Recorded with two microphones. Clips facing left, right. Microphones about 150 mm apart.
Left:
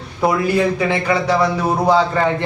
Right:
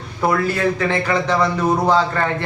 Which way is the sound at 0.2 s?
15° left (ahead or behind).